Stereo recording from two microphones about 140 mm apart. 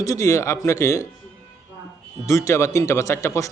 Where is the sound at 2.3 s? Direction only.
20° left (ahead or behind).